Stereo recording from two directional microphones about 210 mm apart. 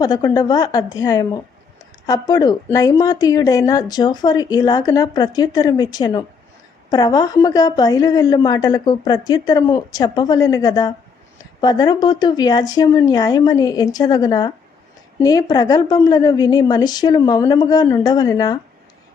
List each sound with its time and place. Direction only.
0.0 s a woman's voice: 20° left (ahead or behind)